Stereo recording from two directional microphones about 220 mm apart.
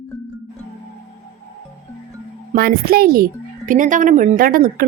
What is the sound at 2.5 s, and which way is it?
Speech, 45° right (ahead or behind).